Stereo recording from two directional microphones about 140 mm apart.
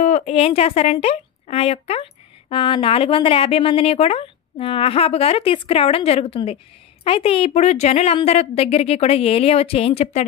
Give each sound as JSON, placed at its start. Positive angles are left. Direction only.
{"t": 0.0, "sound": "a woman's voice", "side_deg": 55}